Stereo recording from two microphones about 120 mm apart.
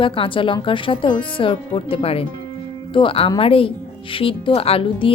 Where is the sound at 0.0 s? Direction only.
45° left (ahead or behind).